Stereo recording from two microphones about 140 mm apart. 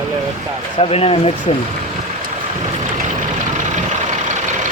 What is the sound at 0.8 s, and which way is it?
Speech, 45° left (ahead or behind).